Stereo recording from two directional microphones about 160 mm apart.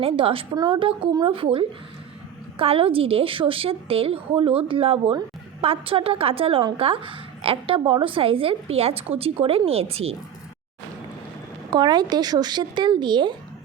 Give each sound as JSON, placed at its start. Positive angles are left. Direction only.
{"t": 0.0, "sound": "a woman's voice", "side_deg": -35}
{"t": 11.7, "sound": "speech", "side_deg": -25}